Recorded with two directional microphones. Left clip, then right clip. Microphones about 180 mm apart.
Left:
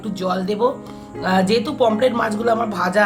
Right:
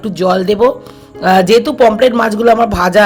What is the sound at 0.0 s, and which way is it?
Speech, 40° right (ahead or behind).